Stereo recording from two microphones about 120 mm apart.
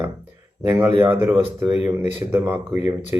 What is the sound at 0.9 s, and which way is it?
Speech, 15° right (ahead or behind).